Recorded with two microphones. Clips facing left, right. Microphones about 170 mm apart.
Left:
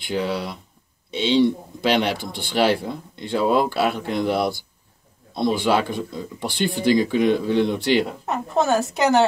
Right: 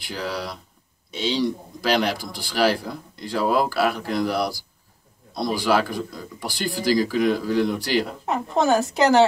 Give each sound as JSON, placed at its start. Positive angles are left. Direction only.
{"t": 0.1, "sound": "speech", "side_deg": 25}
{"t": 8.0, "sound": "a woman's voice", "side_deg": 0}